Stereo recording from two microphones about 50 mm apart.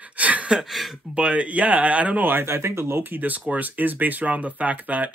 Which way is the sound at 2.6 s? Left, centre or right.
Right.